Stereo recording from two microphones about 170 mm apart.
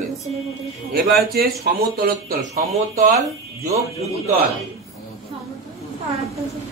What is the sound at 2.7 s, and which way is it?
Speech, 45° right (ahead or behind).